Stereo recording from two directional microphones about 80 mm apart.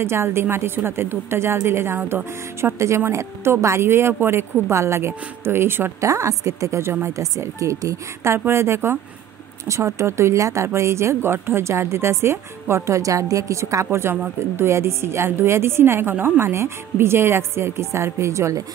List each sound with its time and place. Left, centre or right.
0.0 s speech: right
6.0 s speech: right
13.8 s speech: right